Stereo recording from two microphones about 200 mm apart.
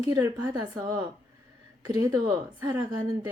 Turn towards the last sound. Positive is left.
turn(degrees=-20)  # may be behind; listen again after turning